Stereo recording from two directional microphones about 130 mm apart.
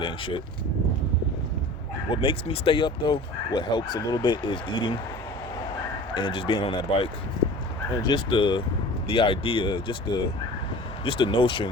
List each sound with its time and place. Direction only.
0.0 s speech: 40° left (ahead or behind)
2.2 s speech: 40° left (ahead or behind)
6.1 s speech: 40° left (ahead or behind)